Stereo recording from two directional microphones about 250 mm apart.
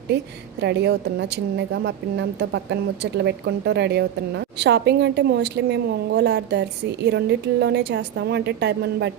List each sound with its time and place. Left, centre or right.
0.6 s a woman's voice: right